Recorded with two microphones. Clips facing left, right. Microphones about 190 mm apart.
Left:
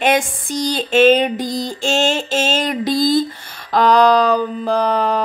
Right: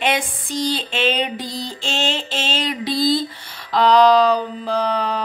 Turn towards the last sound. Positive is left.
turn(degrees=50)  # may be behind; listen again after turning